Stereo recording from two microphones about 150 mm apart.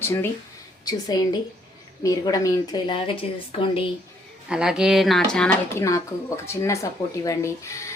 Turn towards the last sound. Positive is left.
turn(degrees=20)  # may be behind; listen again after turning